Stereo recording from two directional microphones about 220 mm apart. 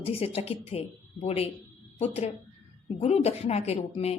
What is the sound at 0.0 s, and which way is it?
A woman's voice, 25° left (ahead or behind).